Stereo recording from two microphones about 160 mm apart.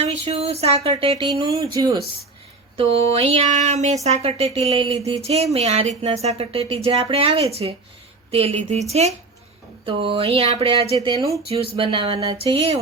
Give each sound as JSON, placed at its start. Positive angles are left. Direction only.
{"t": 0.0, "sound": "speech", "side_deg": -40}
{"t": 2.7, "sound": "speech", "side_deg": -40}